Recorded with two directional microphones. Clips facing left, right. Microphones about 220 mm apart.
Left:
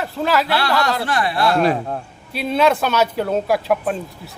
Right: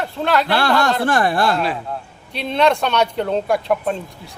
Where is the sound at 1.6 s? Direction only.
40° left (ahead or behind).